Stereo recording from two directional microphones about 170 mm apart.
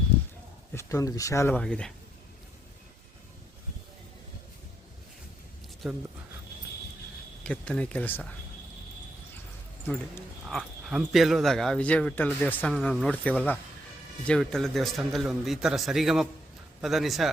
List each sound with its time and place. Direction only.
0.7 s speech: 15° left (ahead or behind)
5.8 s a man's voice: centre (ahead or behind)
7.4 s speech: 5° left (ahead or behind)
10.4 s a man's voice: 5° right (ahead or behind)